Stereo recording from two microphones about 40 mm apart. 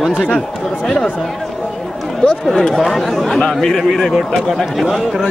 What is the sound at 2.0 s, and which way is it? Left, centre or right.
Speech, centre.